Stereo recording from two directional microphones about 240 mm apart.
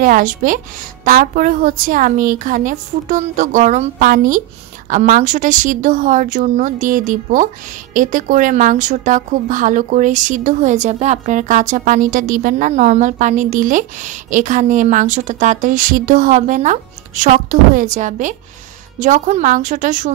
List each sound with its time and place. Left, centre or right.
0.0 s a woman's voice: right